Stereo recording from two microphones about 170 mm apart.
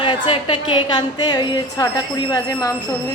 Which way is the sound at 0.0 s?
30° left (ahead or behind).